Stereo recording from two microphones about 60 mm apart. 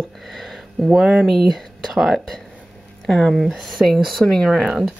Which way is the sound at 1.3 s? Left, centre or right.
Centre.